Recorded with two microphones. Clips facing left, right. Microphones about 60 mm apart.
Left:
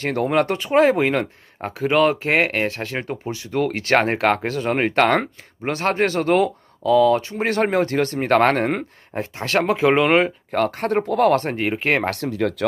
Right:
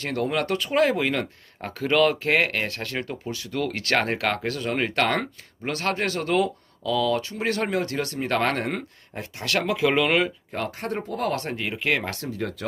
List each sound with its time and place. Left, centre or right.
0.0 s speech: left
1.7 s speech: centre
10.5 s speech: left
11.3 s speech: left
12.1 s speech: left